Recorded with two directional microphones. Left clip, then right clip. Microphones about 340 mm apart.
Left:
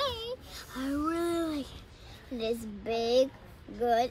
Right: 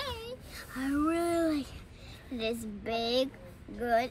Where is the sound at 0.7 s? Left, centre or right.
Centre.